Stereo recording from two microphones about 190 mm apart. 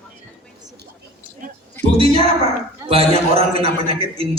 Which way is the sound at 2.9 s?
30° right (ahead or behind).